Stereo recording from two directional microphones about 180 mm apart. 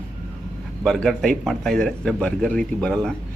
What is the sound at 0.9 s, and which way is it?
A man's voice, 5° left (ahead or behind).